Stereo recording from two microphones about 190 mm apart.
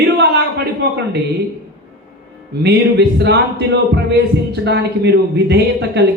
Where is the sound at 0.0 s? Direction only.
60° right (ahead or behind).